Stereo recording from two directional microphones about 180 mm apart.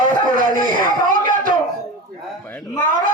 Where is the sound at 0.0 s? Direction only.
50° right (ahead or behind).